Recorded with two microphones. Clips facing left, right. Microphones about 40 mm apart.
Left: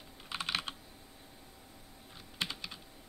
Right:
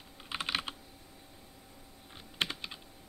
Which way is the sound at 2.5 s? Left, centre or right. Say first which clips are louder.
Right 2 dB; right.